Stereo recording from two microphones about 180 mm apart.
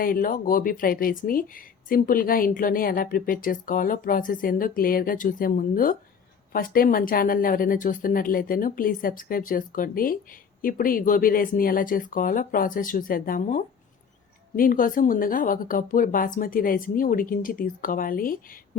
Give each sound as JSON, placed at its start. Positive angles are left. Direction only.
{"t": 0.0, "sound": "speech", "side_deg": 50}